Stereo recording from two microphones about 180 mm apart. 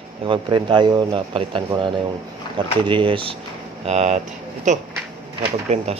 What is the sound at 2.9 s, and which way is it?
A man's voice, 30° right (ahead or behind).